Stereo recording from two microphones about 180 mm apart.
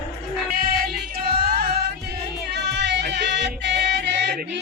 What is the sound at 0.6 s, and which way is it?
Music, 60° right (ahead or behind).